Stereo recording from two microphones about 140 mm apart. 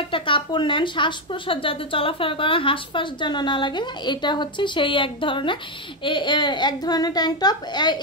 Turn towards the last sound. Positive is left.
turn(degrees=30)  # may be behind; listen again after turning